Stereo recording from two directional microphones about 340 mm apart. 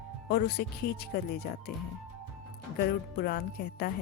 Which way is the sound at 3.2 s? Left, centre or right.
Left.